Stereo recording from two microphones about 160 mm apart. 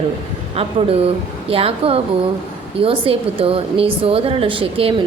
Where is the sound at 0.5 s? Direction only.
40° right (ahead or behind).